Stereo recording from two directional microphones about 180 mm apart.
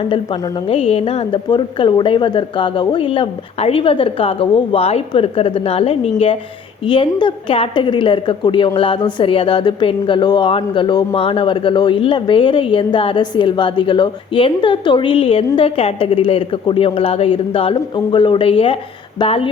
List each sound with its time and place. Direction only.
0.1 s a woman's voice: 25° left (ahead or behind)